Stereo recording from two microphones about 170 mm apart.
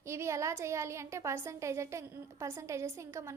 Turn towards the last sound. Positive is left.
turn(degrees=-15)  # may be behind; listen again after turning